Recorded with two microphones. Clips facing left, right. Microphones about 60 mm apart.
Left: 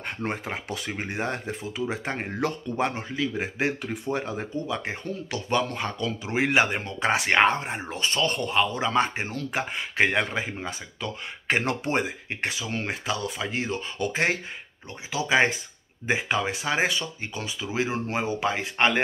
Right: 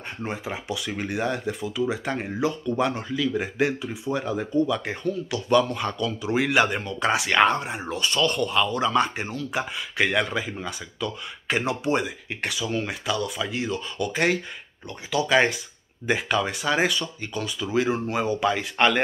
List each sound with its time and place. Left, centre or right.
0.2 s speech: left
0.9 s speech: left
3.8 s speech: left
4.1 s speech: left
11.6 s speech: left